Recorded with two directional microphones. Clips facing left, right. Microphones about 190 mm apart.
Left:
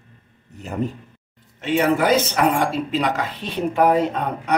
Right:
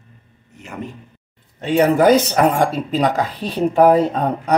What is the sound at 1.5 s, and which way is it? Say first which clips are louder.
Speech: right 4 dB; 40° right (ahead or behind).